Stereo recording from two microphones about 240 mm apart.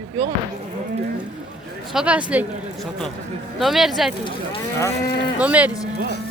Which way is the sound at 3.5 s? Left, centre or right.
Centre.